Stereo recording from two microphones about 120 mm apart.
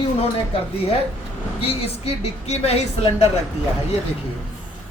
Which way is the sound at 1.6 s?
60° left (ahead or behind).